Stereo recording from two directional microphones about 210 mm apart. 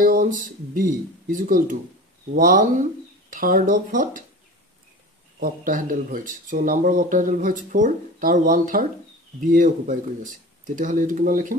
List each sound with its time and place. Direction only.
0.0 s speech: 40° right (ahead or behind)
5.4 s speech: 40° right (ahead or behind)